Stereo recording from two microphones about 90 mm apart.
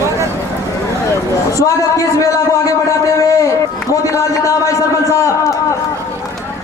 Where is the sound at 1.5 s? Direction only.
40° left (ahead or behind).